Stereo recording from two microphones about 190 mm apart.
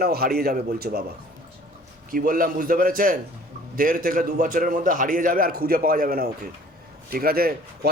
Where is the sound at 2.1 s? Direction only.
45° right (ahead or behind).